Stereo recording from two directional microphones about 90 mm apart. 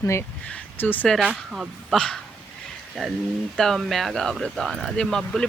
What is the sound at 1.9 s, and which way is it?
Speech, 10° left (ahead or behind).